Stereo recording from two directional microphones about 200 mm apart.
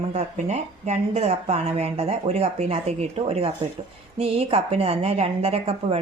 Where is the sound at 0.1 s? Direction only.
35° right (ahead or behind).